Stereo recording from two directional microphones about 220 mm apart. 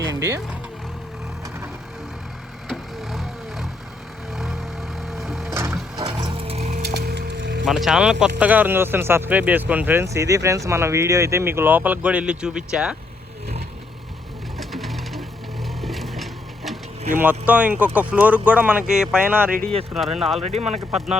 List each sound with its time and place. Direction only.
0.1 s vehicle: 15° right (ahead or behind)
2.6 s vehicle: centre (ahead or behind)
6.0 s music: 15° right (ahead or behind)
6.6 s music: 30° right (ahead or behind)
6.8 s music: 45° right (ahead or behind)
7.6 s speech: centre (ahead or behind)
14.6 s music: centre (ahead or behind)
15.8 s a sound: centre (ahead or behind)
17.1 s speech: 10° right (ahead or behind)
20.4 s speech: 30° right (ahead or behind)